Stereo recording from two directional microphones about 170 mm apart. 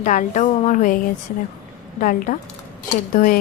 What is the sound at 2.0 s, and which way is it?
Speech, 55° left (ahead or behind).